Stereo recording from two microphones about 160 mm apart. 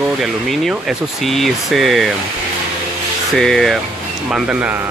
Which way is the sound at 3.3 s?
Centre (ahead or behind).